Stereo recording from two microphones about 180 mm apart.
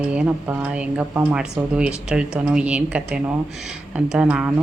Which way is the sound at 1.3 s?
5° right (ahead or behind).